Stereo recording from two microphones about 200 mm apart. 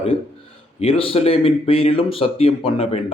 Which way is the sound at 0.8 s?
30° left (ahead or behind).